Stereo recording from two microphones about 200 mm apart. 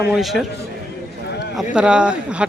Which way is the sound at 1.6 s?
5° right (ahead or behind).